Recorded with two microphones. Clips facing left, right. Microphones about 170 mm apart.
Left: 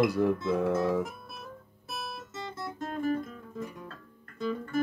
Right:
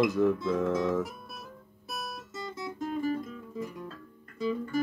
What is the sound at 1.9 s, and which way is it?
Guitar, 45° right (ahead or behind).